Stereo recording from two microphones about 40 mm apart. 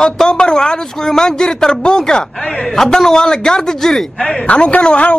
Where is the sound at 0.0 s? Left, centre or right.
Centre.